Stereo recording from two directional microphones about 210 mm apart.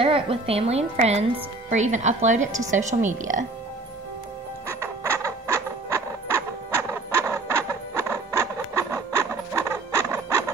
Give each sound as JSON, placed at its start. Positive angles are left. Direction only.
{"t": 0.0, "sound": "a woman's voice", "side_deg": -25}
{"t": 4.6, "sound": "music", "side_deg": -10}
{"t": 8.1, "sound": "a sound", "side_deg": -15}